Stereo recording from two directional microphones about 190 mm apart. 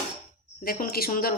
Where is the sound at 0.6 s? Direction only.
50° left (ahead or behind).